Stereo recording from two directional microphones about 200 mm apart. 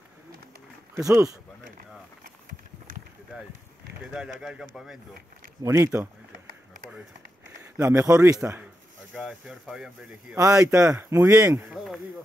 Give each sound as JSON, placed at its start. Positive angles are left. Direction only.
{"t": 0.9, "sound": "speech", "side_deg": -15}
{"t": 4.1, "sound": "speech", "side_deg": -5}
{"t": 5.6, "sound": "a man's voice", "side_deg": -15}
{"t": 7.5, "sound": "a man's voice", "side_deg": -15}
{"t": 10.3, "sound": "a man's voice", "side_deg": -15}
{"t": 11.7, "sound": "speech", "side_deg": 0}